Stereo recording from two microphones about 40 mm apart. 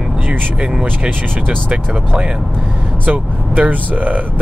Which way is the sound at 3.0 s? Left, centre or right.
Right.